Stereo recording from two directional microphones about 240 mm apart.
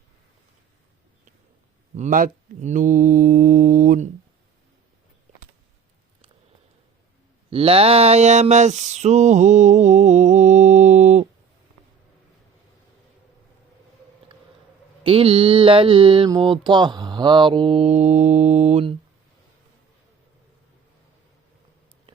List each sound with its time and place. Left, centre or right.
2.0 s mantra: right
7.5 s a sound: right
15.0 s mantra: right